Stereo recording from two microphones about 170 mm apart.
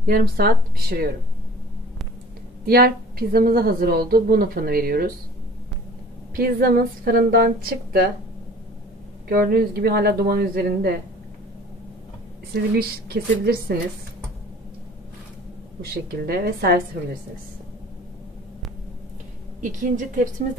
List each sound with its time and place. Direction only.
0.0 s a woman's voice: 60° right (ahead or behind)
2.6 s a woman's voice: 60° right (ahead or behind)
6.3 s a woman's voice: 60° right (ahead or behind)
9.3 s a woman's voice: 60° right (ahead or behind)
12.5 s a woman's voice: 65° right (ahead or behind)
15.8 s a woman's voice: 65° right (ahead or behind)
19.6 s a woman's voice: 50° right (ahead or behind)